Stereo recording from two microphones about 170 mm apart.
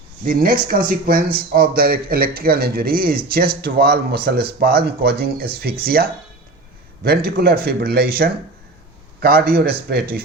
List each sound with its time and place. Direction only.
0.3 s a man's voice: 55° right (ahead or behind)